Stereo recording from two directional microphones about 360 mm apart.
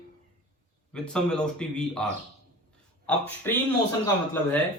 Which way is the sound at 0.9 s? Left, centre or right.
Centre.